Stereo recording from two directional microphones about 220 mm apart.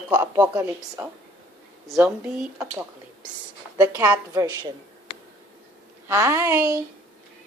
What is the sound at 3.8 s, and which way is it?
Speech, 15° right (ahead or behind).